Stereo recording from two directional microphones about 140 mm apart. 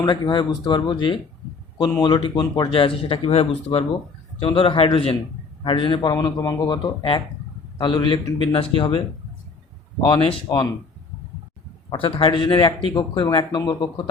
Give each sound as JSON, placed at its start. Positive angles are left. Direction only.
{"t": 0.0, "sound": "speech", "side_deg": 30}
{"t": 10.1, "sound": "speech", "side_deg": 30}
{"t": 11.9, "sound": "speech", "side_deg": 40}